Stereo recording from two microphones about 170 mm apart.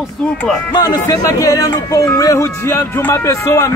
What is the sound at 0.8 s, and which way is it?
Speech, 25° left (ahead or behind).